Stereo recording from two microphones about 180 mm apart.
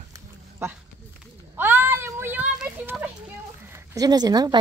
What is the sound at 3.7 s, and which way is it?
Speech, 20° right (ahead or behind).